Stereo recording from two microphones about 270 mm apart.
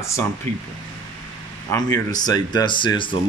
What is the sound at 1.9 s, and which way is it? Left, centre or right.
Speech, centre.